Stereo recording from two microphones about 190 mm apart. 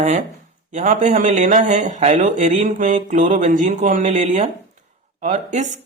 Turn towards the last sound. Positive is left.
turn(degrees=-40)  # may be behind; listen again after turning